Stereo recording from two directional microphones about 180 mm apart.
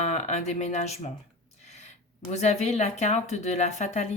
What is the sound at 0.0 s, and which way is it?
Speech, 40° left (ahead or behind).